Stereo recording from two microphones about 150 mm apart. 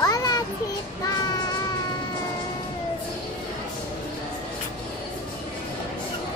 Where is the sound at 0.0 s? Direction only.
25° left (ahead or behind).